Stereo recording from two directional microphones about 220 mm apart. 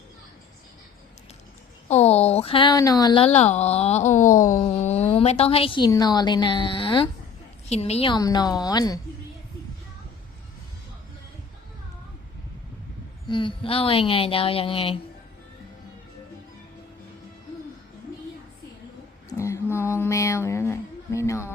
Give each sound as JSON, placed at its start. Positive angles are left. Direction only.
{"t": 1.9, "sound": "a woman's voice", "side_deg": 30}
{"t": 13.2, "sound": "a woman's voice", "side_deg": 20}
{"t": 19.3, "sound": "speech", "side_deg": 15}